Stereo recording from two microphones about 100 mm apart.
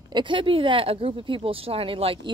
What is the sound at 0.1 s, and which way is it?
Speech, 55° right (ahead or behind).